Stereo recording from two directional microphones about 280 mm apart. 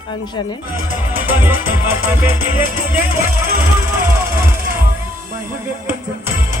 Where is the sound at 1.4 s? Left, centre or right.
Centre.